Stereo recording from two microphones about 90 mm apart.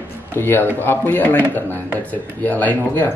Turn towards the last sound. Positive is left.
turn(degrees=20)  # may be behind; listen again after turning